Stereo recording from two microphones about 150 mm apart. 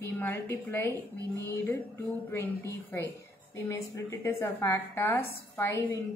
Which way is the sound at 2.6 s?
15° left (ahead or behind).